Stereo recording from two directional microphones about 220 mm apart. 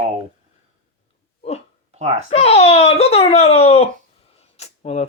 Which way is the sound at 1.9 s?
30° right (ahead or behind).